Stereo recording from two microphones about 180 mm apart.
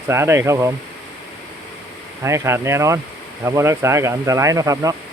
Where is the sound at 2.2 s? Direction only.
15° right (ahead or behind).